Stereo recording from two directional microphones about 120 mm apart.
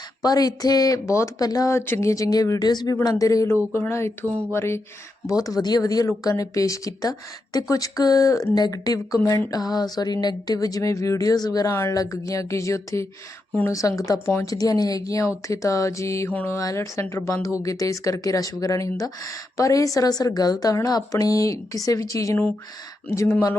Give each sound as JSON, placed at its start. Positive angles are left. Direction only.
{"t": 0.2, "sound": "speech", "side_deg": 30}
{"t": 16.3, "sound": "mantra", "side_deg": 15}
{"t": 16.6, "sound": "speech", "side_deg": 25}